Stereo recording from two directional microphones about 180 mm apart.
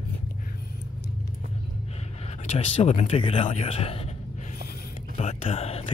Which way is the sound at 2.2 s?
35° left (ahead or behind).